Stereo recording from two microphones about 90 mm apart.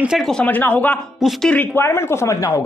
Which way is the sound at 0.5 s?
20° left (ahead or behind).